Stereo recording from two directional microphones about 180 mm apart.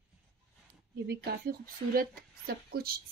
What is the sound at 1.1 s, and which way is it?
A woman's voice, 55° right (ahead or behind).